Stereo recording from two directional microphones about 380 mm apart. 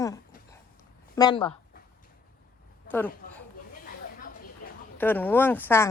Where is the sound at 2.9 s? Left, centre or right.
Centre.